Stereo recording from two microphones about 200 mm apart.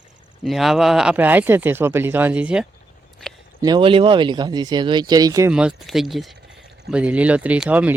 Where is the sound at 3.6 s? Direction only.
25° right (ahead or behind).